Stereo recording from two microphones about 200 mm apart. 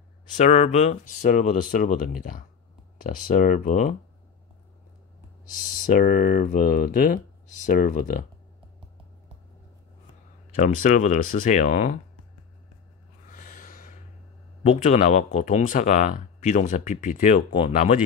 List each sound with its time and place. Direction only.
0.4 s speech: 35° left (ahead or behind)
5.4 s speech: 40° left (ahead or behind)
10.5 s speech: 40° left (ahead or behind)
13.3 s snort: 40° left (ahead or behind)
14.7 s speech: 40° left (ahead or behind)